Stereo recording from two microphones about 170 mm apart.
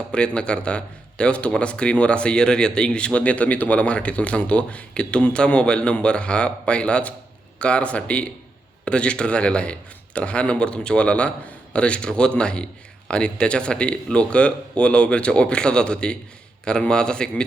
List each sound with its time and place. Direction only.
0.1 s a man's voice: 5° left (ahead or behind)